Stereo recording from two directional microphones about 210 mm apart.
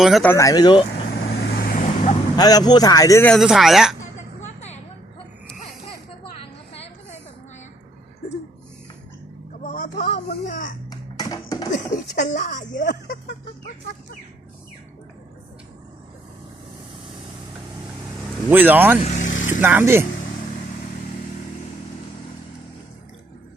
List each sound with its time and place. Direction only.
0.0 s speech: centre (ahead or behind)
0.3 s speech: 15° left (ahead or behind)
1.2 s vehicle: 45° left (ahead or behind)
2.3 s speech: 20° left (ahead or behind)
3.3 s speech: centre (ahead or behind)
6.3 s vehicle: 30° left (ahead or behind)
9.6 s a sound: 40° left (ahead or behind)
10.8 s music: 20° left (ahead or behind)
11.7 s a sound: 35° left (ahead or behind)
18.5 s speech: 10° right (ahead or behind)
19.0 s vehicle: 35° left (ahead or behind)
19.5 s speech: 10° right (ahead or behind)